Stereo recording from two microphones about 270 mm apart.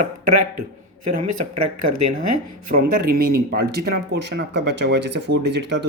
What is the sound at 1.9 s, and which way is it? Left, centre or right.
Speech, right.